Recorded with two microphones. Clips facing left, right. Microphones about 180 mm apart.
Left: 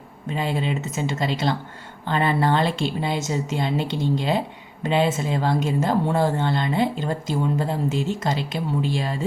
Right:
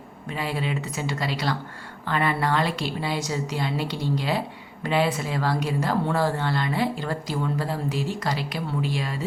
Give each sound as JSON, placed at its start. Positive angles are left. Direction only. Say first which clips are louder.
{"t": 0.3, "sound": "a woman's voice", "louder": "left 3 dB", "side_deg": 25}